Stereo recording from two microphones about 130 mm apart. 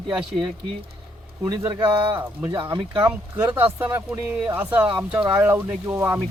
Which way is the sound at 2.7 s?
30° right (ahead or behind).